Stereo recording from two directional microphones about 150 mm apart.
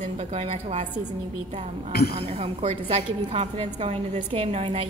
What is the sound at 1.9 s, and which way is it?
Speech, 90° left.